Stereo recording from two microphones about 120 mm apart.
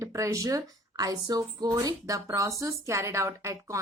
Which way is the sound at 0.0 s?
25° right (ahead or behind).